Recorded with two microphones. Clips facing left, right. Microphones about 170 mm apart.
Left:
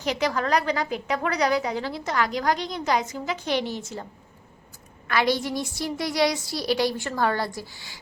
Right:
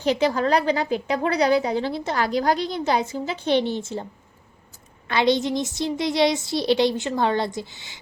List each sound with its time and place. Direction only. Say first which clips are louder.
0.0 s a woman's voice: right 5 dB; 30° right (ahead or behind)
5.0 s a woman's voice: right 3 dB; 25° right (ahead or behind)